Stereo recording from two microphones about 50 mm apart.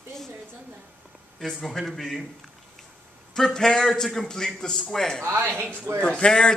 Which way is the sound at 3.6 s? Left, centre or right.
Centre.